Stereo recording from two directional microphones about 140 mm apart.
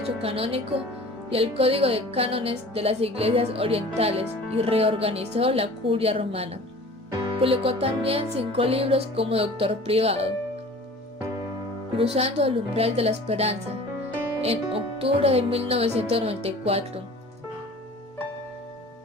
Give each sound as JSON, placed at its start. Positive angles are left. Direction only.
{"t": 0.2, "sound": "speech", "side_deg": -45}
{"t": 11.9, "sound": "speech", "side_deg": -45}